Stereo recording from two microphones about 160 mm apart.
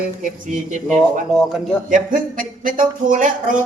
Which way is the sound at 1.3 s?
Centre (ahead or behind).